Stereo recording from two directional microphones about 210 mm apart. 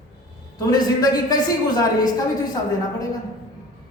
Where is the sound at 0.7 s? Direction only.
20° left (ahead or behind).